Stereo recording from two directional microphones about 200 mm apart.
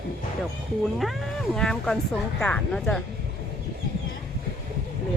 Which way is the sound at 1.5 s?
5° left (ahead or behind).